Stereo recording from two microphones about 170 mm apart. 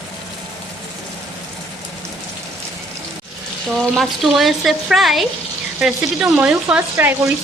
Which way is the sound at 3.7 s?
Centre (ahead or behind).